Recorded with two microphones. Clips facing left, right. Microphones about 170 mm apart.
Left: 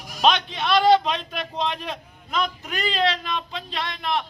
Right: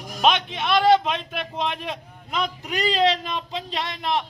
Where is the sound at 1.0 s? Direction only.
10° right (ahead or behind).